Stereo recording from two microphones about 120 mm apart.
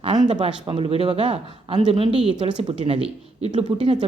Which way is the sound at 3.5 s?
65° right (ahead or behind).